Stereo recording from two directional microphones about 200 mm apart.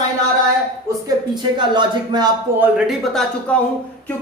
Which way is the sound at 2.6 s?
5° right (ahead or behind).